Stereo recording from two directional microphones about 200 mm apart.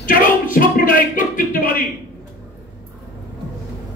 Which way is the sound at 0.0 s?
45° left (ahead or behind).